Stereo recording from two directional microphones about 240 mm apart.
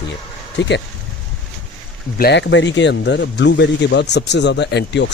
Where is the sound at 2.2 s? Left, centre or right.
Left.